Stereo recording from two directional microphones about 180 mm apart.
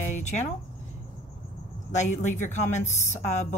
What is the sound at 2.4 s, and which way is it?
Speech, 40° left (ahead or behind).